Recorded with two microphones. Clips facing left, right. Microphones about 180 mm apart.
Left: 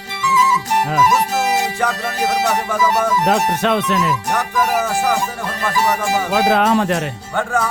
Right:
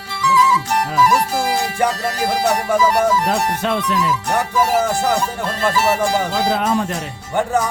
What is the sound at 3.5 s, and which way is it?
Speech, 85° left.